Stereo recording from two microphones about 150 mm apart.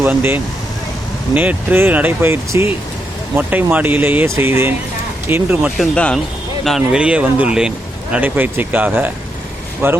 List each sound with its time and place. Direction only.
0.0 s speech: 15° right (ahead or behind)
5.7 s speech: 5° left (ahead or behind); by 10.0 s 15° right (ahead or behind)